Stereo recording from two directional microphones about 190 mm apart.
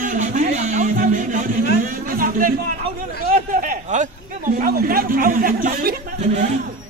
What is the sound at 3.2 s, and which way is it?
Speech, 50° right (ahead or behind).